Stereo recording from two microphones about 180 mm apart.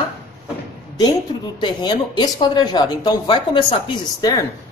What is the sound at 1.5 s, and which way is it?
Speech, 25° left (ahead or behind).